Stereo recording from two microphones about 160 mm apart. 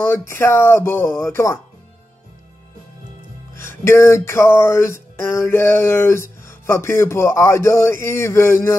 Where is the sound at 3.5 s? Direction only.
15° left (ahead or behind).